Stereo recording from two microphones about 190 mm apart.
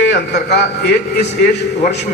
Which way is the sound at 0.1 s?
60° left (ahead or behind).